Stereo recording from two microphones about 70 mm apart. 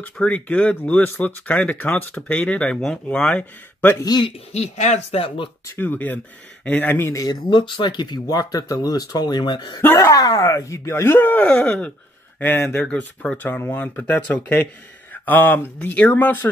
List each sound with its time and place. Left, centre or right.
0.0 s speech: left
4.1 s speech: left
5.8 s speech: left
7.2 s speech: left
9.9 s speech: left; by 11.9 s centre
12.4 s speech: left
12.8 s speech: centre